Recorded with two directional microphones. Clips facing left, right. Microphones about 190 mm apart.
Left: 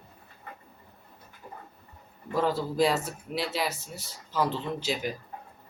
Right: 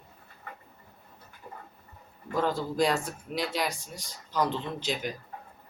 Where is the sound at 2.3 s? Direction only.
5° left (ahead or behind).